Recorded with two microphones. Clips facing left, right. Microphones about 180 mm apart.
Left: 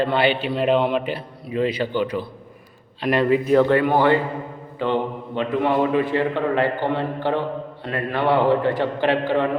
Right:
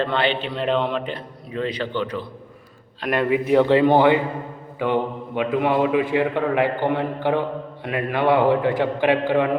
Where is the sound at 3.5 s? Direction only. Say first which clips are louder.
Right 3 dB; 15° right (ahead or behind).